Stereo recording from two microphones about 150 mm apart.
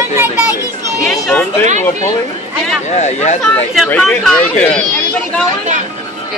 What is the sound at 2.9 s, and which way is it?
Speech, 50° left (ahead or behind).